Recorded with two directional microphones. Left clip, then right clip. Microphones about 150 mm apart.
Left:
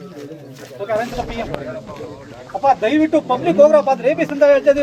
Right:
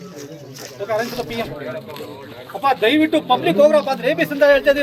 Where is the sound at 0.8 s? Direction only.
5° left (ahead or behind).